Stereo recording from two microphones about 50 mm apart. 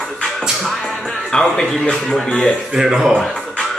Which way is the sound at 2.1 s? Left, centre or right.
Centre.